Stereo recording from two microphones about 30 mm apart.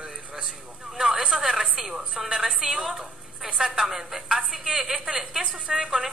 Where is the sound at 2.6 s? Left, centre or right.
Centre.